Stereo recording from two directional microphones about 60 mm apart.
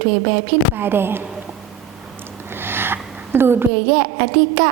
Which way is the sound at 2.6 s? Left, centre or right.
Right.